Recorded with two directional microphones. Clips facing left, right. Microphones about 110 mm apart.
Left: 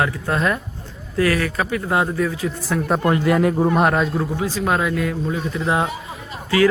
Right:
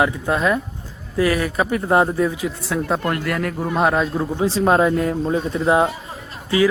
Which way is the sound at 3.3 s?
20° left (ahead or behind).